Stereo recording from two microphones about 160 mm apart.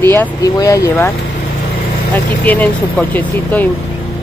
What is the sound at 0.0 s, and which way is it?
Speech, 15° left (ahead or behind).